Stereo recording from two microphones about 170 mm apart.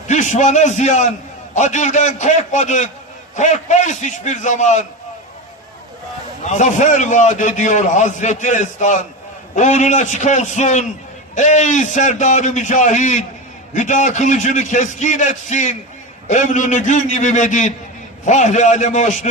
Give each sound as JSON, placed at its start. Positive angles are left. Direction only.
{"t": 0.1, "sound": "a man's voice", "side_deg": 45}
{"t": 6.4, "sound": "a man's voice", "side_deg": 45}